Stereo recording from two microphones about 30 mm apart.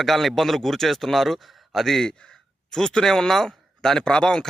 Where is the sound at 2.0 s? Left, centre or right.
Left.